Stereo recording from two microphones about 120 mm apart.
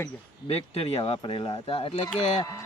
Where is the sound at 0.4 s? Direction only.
55° left (ahead or behind).